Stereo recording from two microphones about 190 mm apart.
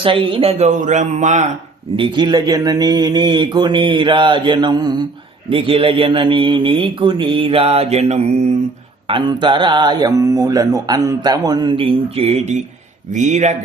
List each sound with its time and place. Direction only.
0.0 s speech: 30° right (ahead or behind)
2.0 s speech: 25° right (ahead or behind)